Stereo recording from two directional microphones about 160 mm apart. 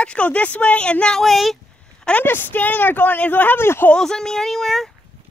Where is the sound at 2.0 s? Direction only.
10° left (ahead or behind).